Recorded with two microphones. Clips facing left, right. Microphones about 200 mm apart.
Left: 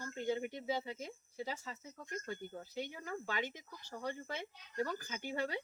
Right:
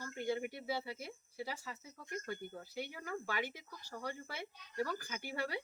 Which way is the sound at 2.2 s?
15° left (ahead or behind).